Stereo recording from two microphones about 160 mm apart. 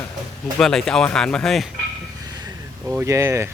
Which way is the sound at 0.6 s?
5° left (ahead or behind).